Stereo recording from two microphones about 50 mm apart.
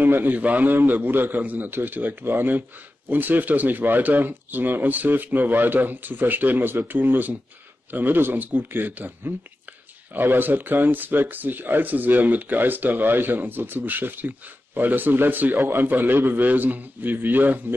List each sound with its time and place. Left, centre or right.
0.0 s a man's voice: right
0.4 s speech: right
15.6 s a man's voice: right